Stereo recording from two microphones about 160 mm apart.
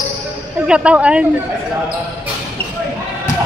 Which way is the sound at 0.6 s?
5° right (ahead or behind).